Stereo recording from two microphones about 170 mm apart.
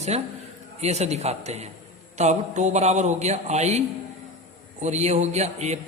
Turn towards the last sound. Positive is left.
turn(degrees=-40)  # may be behind; listen again after turning